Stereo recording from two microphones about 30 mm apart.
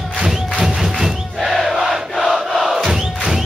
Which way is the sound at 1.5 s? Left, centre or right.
Centre.